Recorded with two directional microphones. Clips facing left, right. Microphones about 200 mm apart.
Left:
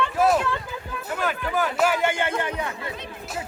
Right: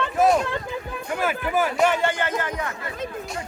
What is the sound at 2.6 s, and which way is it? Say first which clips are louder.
Chatter: even; 20° left (ahead or behind).